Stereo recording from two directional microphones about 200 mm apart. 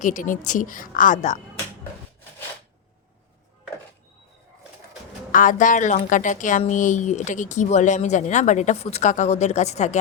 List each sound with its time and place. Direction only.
0.0 s a woman's voice: 40° left (ahead or behind)
5.3 s a woman's voice: 40° left (ahead or behind)